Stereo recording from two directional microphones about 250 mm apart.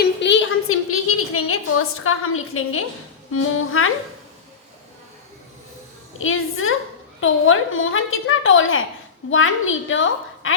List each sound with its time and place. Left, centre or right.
0.0 s a sound: left
3.3 s speech: left
6.1 s a woman's voice: left